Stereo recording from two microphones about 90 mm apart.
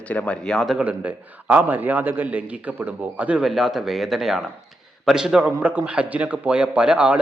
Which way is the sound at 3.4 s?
5° right (ahead or behind).